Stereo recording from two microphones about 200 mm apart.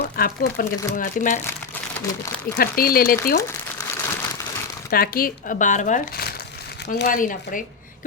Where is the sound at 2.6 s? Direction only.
45° left (ahead or behind).